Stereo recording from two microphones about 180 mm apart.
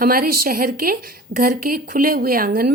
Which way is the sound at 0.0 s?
55° right (ahead or behind).